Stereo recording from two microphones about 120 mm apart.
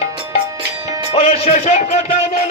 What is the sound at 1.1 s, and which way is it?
Speech, 60° left (ahead or behind).